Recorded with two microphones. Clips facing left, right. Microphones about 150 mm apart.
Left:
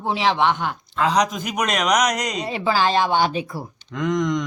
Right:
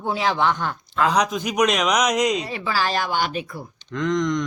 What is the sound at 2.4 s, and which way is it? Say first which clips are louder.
Speech: left 4 dB; 25° left (ahead or behind).